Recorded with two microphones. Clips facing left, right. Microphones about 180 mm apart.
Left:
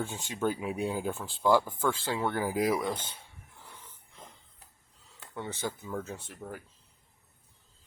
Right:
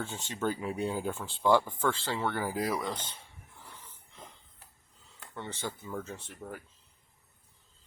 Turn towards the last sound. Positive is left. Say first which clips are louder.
# left 1 dB
turn(degrees=10)  # may be behind; listen again after turning